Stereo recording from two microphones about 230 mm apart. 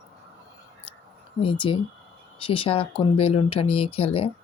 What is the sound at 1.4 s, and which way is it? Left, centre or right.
Speech, left.